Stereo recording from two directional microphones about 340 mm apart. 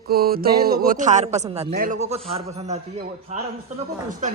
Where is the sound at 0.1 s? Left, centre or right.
Right.